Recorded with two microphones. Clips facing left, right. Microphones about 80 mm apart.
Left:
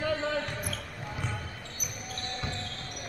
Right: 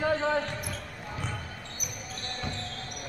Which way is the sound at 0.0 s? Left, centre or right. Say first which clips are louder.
Right 3 dB; right.